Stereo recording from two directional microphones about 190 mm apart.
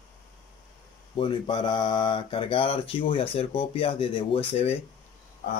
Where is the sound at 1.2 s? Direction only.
25° left (ahead or behind).